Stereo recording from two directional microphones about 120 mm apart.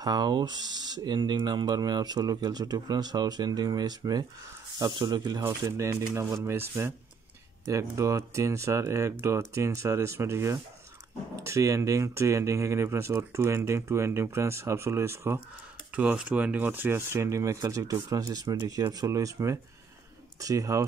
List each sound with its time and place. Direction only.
0.0 s speech: 35° right (ahead or behind)